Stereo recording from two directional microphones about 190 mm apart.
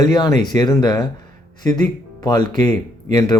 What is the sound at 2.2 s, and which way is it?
Speech, 20° left (ahead or behind).